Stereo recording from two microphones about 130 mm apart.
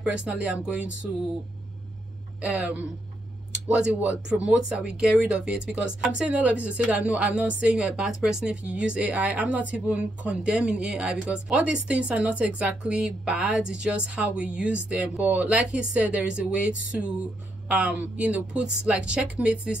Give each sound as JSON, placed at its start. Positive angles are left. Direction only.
{"t": 0.0, "sound": "speech", "side_deg": -10}
{"t": 2.4, "sound": "speech", "side_deg": -10}